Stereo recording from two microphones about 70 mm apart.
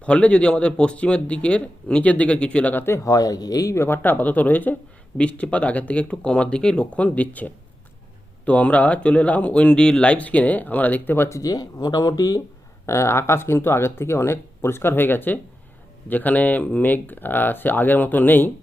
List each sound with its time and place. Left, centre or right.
0.0 s speech: centre
2.7 s speech: left
3.0 s speech: left
3.8 s speech: left
11.3 s speech: left
12.8 s speech: left